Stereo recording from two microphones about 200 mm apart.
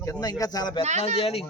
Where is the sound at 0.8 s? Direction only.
35° right (ahead or behind).